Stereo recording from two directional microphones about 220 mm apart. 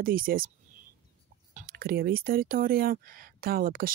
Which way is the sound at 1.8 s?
45° right (ahead or behind).